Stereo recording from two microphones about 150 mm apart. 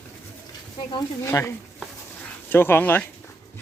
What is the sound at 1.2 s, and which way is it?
Speech, 20° left (ahead or behind).